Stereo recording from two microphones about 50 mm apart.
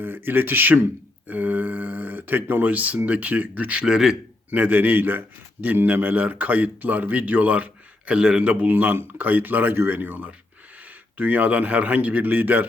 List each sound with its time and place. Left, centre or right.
0.0 s speech: right
1.3 s a sound: right
3.1 s speech: right
3.8 s speech: centre
4.5 s a man's voice: right
8.5 s a man's voice: right